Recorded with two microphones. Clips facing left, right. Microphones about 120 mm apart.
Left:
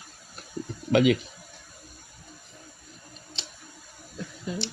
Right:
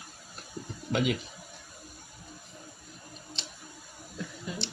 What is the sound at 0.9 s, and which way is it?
Speech, 90° left.